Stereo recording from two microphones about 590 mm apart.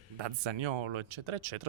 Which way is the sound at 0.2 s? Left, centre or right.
Right.